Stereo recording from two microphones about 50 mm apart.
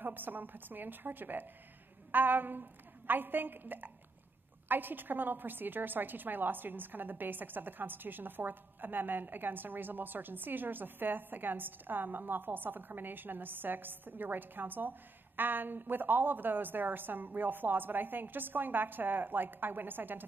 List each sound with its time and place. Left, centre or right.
0.0 s a woman's voice: right